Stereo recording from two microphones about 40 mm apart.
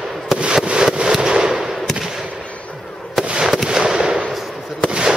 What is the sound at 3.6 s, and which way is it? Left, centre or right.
Fireworks, centre.